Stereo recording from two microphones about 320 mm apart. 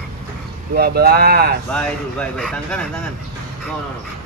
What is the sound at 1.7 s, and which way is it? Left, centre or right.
Speech, centre.